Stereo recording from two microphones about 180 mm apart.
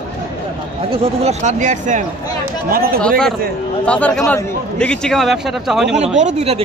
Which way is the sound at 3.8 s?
5° left (ahead or behind).